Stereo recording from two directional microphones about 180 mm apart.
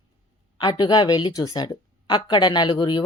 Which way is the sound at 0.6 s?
25° left (ahead or behind).